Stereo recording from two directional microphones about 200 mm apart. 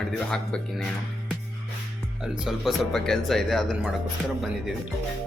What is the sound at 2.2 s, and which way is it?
Speech, 5° right (ahead or behind).